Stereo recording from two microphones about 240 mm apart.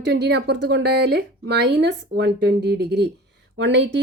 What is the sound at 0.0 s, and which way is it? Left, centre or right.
A woman's voice, right.